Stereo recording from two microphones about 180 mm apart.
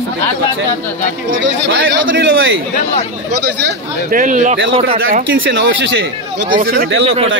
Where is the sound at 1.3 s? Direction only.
90° right.